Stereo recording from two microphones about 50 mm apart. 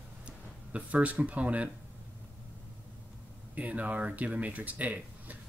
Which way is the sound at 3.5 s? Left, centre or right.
Right.